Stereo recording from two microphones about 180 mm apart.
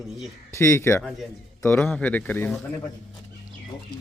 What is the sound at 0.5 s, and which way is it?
Speech, 15° left (ahead or behind).